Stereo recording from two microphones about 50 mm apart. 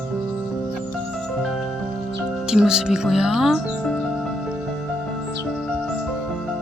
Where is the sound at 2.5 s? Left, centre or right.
Centre.